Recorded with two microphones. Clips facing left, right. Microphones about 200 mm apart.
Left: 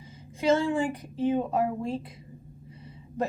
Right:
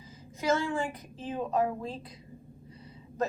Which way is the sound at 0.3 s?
30° left (ahead or behind).